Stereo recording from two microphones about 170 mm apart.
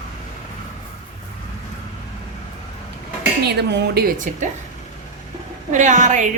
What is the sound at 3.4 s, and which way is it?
Speech, 70° right (ahead or behind).